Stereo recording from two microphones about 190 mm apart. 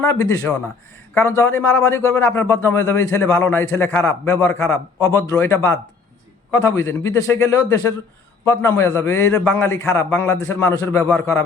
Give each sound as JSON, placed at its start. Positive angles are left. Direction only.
{"t": 0.0, "sound": "a man's voice", "side_deg": 15}